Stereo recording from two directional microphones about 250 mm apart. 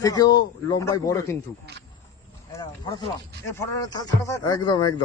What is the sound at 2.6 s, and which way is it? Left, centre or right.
Snake, centre.